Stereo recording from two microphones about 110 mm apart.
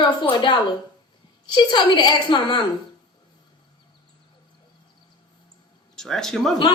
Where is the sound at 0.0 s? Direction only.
45° left (ahead or behind).